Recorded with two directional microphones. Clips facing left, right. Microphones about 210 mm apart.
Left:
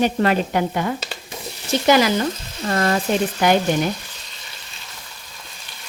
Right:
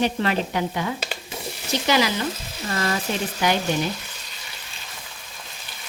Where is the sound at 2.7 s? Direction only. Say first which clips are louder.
Left 6 dB; 55° left (ahead or behind).